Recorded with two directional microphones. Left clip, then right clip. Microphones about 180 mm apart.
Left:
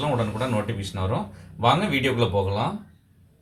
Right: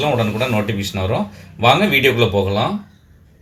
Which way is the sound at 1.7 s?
40° right (ahead or behind).